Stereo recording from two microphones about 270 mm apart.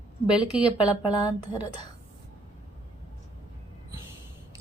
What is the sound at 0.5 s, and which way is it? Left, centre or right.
Speech, centre.